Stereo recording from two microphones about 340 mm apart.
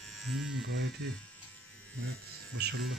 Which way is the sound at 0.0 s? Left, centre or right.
Centre.